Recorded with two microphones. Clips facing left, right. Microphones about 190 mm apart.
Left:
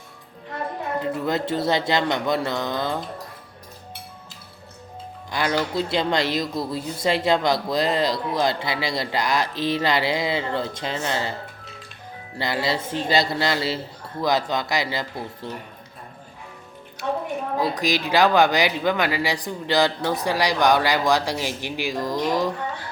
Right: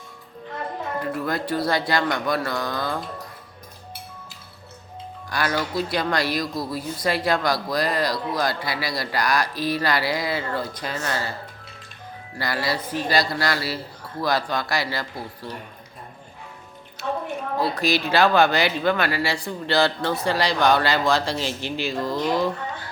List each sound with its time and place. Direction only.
1.0 s speech: 20° left (ahead or behind)
5.3 s speech: 20° left (ahead or behind)
12.4 s speech: 20° left (ahead or behind)
17.6 s speech: 15° left (ahead or behind)